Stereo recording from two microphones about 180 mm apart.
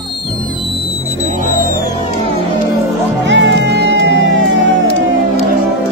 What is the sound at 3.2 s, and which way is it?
Music, 85° right.